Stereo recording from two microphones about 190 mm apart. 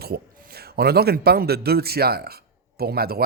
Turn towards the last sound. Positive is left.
turn(degrees=-55)  # may be behind; listen again after turning